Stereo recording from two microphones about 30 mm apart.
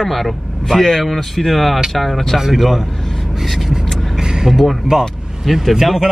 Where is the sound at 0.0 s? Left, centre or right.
Centre.